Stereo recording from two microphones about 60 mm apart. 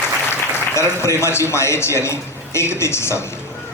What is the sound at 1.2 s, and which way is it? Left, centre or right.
A man's voice, left.